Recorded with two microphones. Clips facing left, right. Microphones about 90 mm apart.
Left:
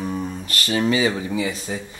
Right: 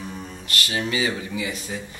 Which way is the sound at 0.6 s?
35° left (ahead or behind).